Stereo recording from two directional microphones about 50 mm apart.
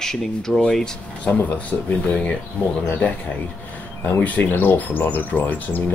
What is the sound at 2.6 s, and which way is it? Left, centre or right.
Speech, left.